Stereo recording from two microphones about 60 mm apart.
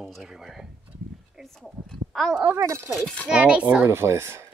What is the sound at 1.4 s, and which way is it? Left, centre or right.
Speech, centre.